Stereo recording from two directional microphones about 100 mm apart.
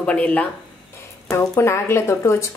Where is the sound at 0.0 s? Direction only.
15° left (ahead or behind).